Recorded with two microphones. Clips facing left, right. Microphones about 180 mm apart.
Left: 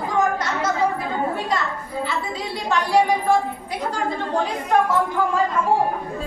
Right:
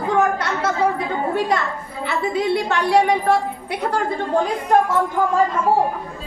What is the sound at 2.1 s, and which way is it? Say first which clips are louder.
A woman's voice: right 7 dB; 65° right (ahead or behind).